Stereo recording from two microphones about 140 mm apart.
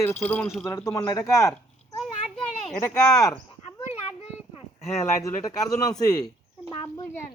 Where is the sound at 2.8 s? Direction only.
25° left (ahead or behind).